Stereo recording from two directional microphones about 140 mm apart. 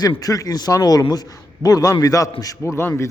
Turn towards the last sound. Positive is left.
turn(degrees=15)  # may be behind; listen again after turning